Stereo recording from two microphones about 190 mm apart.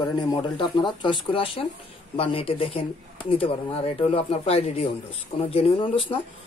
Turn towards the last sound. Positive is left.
turn(degrees=30)  # may be behind; listen again after turning